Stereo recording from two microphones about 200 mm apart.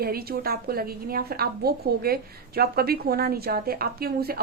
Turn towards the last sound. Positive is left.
turn(degrees=-50)  # may be behind; listen again after turning